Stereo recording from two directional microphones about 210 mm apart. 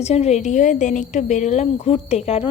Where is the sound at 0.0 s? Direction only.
30° left (ahead or behind).